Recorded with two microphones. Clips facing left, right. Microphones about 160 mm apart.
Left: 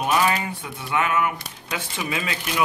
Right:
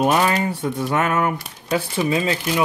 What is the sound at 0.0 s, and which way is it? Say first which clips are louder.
Speech: right 4 dB; 40° right (ahead or behind).